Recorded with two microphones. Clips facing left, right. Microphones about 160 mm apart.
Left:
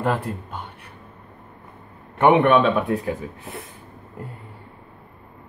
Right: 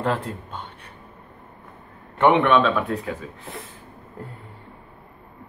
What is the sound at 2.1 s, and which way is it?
Speech, 15° left (ahead or behind).